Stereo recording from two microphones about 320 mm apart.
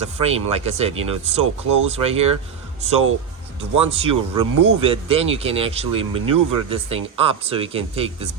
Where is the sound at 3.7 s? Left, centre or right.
Centre.